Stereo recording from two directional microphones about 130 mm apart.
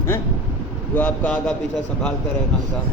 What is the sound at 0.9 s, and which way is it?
Speech, 10° left (ahead or behind).